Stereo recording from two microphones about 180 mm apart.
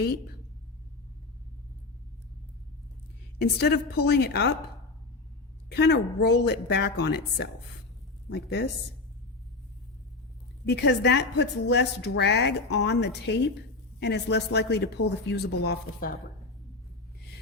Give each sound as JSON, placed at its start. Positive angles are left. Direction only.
{"t": 3.3, "sound": "a woman's voice", "side_deg": 65}
{"t": 5.6, "sound": "a woman's voice", "side_deg": 70}
{"t": 10.7, "sound": "a woman's voice", "side_deg": 70}